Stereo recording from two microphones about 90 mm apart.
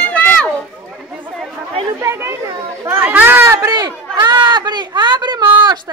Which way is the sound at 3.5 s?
30° right (ahead or behind).